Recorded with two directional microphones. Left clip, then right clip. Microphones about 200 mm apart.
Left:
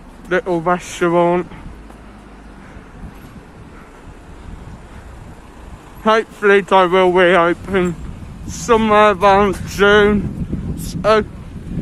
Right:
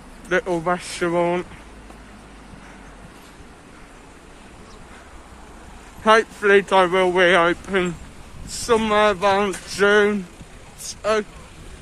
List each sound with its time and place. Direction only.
0.3 s speech: centre (ahead or behind)
6.0 s speech: 10° left (ahead or behind)
7.2 s speech: 5° left (ahead or behind)